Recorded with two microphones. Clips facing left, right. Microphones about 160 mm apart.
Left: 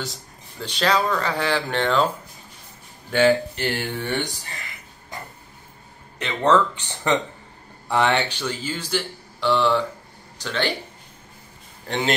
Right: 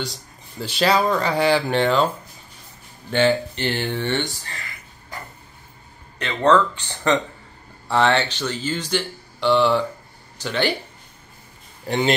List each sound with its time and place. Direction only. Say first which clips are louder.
0.6 s speech: right 3 dB; 5° right (ahead or behind)
3.1 s speech: left 1 dB; 5° left (ahead or behind)
6.1 s speech: right 2 dB; 20° left (ahead or behind); by 10.7 s 5° right (ahead or behind)